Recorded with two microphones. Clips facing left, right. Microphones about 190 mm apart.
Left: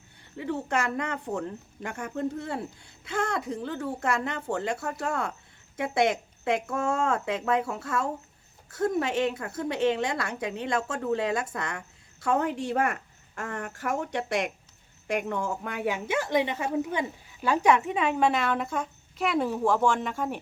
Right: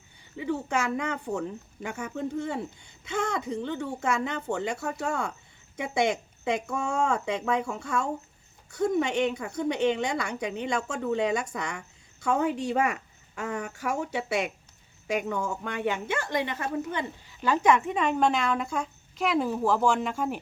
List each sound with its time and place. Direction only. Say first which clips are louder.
0.2 s speech: right 1 dB; centre (ahead or behind)